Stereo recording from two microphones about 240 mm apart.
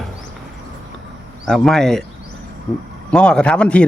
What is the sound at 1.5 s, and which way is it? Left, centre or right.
Speech, centre.